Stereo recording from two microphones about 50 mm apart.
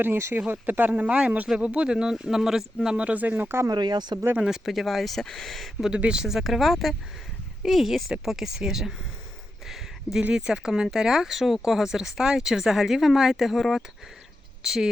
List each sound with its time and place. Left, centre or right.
0.0 s speech: right
0.3 s speech: right; by 2.6 s centre
2.8 s speech: right
4.4 s speech: centre
5.9 s speech: centre
9.6 s a sound: centre
10.3 s speech: centre